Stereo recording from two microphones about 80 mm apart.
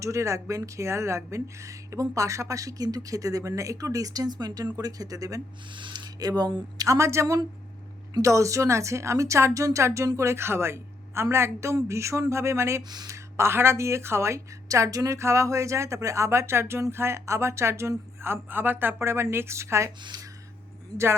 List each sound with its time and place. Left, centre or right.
0.0 s speech: right
5.7 s speech: right
6.1 s a woman's voice: right
12.9 s speech: right
13.1 s a woman's voice: right
20.0 s speech: right